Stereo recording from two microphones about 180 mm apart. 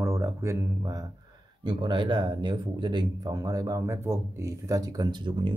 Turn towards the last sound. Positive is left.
turn(degrees=-25)  # may be behind; listen again after turning